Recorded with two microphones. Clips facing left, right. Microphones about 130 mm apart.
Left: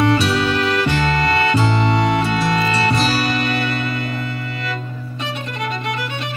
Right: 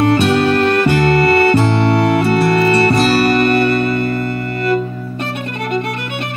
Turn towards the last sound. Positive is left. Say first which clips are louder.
# right 10 dB
turn(degrees=-55)  # may be behind; listen again after turning